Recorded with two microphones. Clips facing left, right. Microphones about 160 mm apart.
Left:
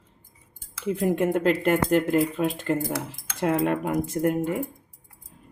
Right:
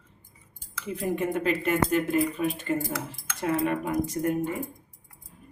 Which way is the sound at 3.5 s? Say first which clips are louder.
Left 2 dB; 55° left (ahead or behind).